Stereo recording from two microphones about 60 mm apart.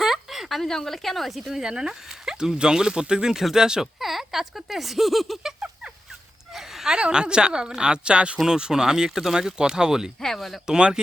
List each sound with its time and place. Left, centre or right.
0.0 s speech: centre
10.8 s speech: centre